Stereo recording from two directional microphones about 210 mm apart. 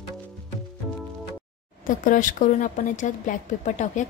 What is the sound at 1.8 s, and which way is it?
Speech, 40° left (ahead or behind).